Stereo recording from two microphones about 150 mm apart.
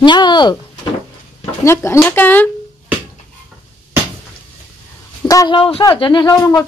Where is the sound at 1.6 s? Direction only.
15° left (ahead or behind).